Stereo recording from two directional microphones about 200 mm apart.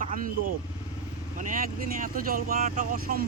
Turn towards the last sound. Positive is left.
turn(degrees=-45)  # may be behind; listen again after turning